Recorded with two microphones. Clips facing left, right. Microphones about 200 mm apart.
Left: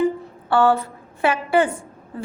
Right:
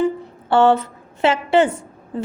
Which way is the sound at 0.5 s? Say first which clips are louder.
Right 3 dB; 20° right (ahead or behind).